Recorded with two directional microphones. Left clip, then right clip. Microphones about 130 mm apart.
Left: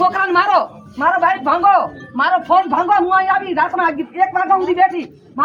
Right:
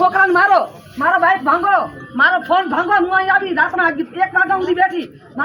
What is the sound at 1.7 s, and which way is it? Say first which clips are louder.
Speech: even; 20° right (ahead or behind).